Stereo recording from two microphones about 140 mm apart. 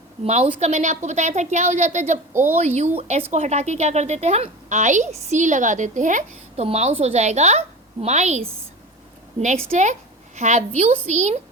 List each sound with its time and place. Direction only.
0.4 s a woman's voice: 50° right (ahead or behind)
2.3 s a woman's voice: 15° right (ahead or behind)
2.6 s a woman's voice: 50° right (ahead or behind)
6.6 s a woman's voice: 45° right (ahead or behind)
9.7 s a woman's voice: 60° right (ahead or behind)